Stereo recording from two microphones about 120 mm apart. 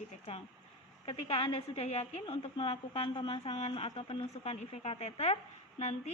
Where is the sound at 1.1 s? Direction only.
55° left (ahead or behind).